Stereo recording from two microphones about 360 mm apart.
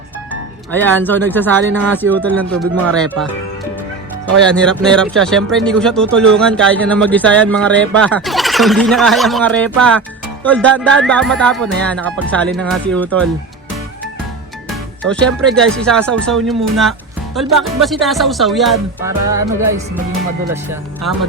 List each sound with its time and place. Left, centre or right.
0.7 s music: centre
4.4 s music: centre
14.7 s music: centre
20.5 s speech: centre